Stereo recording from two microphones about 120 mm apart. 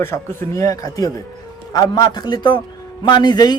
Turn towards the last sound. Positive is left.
turn(degrees=35)  # may be behind; listen again after turning